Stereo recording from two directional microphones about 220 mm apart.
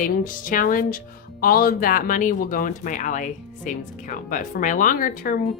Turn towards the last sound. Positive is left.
turn(degrees=40)  # may be behind; listen again after turning